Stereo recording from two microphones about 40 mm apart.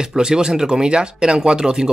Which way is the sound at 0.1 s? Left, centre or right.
Centre.